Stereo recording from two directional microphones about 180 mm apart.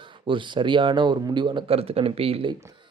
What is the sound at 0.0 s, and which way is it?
Speech, 25° right (ahead or behind).